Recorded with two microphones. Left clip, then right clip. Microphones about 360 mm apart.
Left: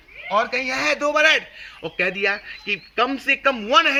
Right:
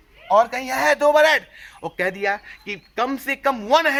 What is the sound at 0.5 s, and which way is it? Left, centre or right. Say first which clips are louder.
A man's voice: right 2 dB; right.